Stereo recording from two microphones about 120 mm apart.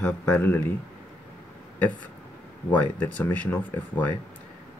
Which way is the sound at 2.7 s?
10° left (ahead or behind).